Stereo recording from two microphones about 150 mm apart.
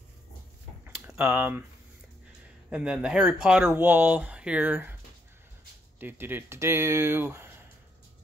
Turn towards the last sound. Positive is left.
turn(degrees=-15)  # may be behind; listen again after turning